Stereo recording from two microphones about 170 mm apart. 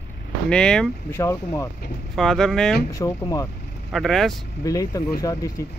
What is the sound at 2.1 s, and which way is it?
Speech, 5° left (ahead or behind).